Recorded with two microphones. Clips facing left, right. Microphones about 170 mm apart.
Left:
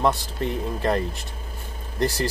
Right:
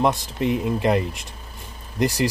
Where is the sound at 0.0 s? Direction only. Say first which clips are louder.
Right 2 dB; 15° right (ahead or behind).